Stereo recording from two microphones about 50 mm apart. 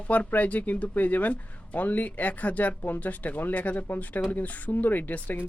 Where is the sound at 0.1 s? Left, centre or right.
Left.